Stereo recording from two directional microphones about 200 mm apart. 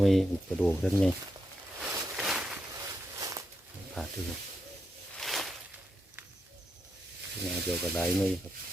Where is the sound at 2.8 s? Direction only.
15° right (ahead or behind).